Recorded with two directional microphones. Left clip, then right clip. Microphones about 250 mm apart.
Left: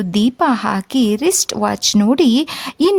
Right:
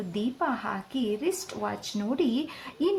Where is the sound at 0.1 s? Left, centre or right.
Left.